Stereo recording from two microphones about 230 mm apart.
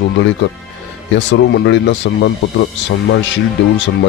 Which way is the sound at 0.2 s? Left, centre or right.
Left.